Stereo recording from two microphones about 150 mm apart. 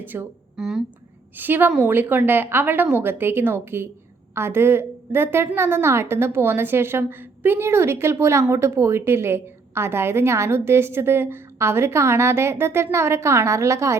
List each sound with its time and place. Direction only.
0.0 s a woman's voice: 15° right (ahead or behind)